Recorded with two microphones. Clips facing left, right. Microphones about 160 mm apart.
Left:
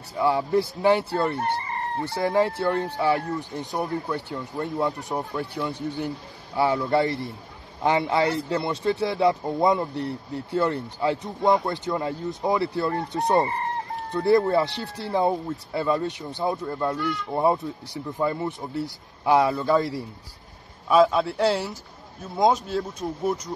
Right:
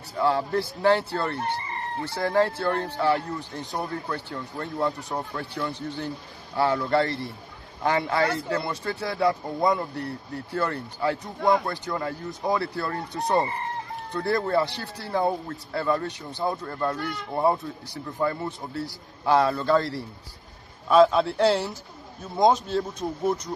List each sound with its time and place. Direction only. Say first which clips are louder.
0.2 s speech: left 2 dB; 10° left (ahead or behind)
6.7 s speech: left 1 dB; 20° left (ahead or behind)